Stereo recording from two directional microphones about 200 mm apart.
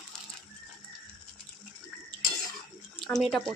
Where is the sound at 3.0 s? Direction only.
Centre (ahead or behind).